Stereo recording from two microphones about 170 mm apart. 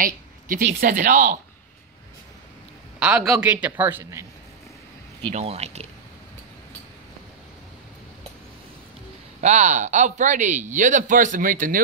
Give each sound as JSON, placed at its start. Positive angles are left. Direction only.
{"t": 0.0, "sound": "speech", "side_deg": -55}
{"t": 3.0, "sound": "a man's voice", "side_deg": -5}
{"t": 5.3, "sound": "speech", "side_deg": -40}
{"t": 9.4, "sound": "speech", "side_deg": -45}